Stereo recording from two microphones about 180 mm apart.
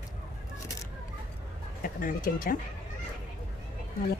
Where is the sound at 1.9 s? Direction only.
50° left (ahead or behind).